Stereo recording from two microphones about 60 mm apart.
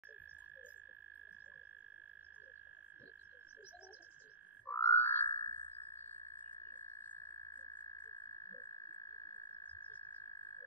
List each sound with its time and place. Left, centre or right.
4.6 s frog: left
7.5 s frog: left
9.3 s frog: left
10.2 s frog: left